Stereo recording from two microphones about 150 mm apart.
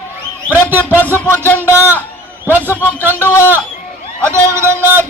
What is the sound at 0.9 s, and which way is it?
Music, 15° right (ahead or behind).